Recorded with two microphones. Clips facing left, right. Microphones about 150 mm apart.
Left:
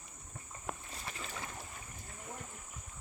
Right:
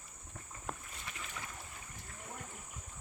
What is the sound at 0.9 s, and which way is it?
Boat, 35° left (ahead or behind).